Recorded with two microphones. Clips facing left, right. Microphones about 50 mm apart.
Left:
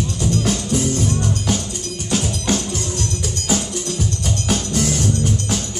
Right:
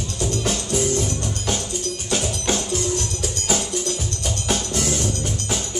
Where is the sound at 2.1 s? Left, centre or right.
Centre.